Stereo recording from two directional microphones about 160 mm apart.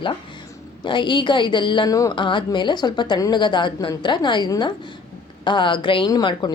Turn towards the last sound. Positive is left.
turn(degrees=25)  # may be behind; listen again after turning